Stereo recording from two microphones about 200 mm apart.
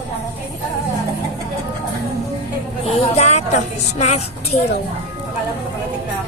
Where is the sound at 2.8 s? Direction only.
30° left (ahead or behind).